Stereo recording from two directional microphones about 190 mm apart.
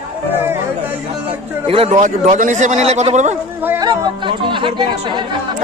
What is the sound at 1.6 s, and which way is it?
A man's voice, 30° right (ahead or behind).